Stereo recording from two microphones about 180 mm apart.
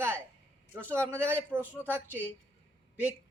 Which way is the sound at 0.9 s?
15° right (ahead or behind).